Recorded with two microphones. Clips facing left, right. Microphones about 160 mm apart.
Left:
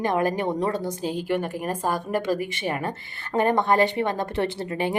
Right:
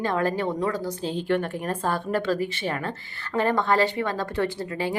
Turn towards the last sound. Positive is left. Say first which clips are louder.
# left 1 dB
turn(degrees=25)  # may be behind; listen again after turning